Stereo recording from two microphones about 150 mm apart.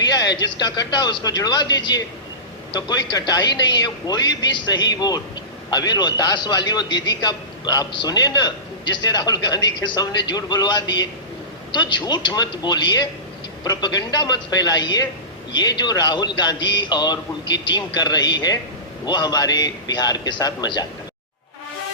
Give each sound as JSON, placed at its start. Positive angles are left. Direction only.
{"t": 0.1, "sound": "a man's voice", "side_deg": 25}